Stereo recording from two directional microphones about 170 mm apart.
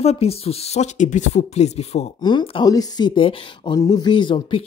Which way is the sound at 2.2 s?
30° left (ahead or behind).